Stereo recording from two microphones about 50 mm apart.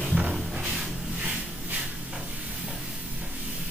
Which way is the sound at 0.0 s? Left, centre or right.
Right.